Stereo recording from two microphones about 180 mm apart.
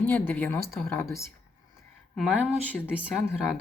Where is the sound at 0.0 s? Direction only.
10° left (ahead or behind).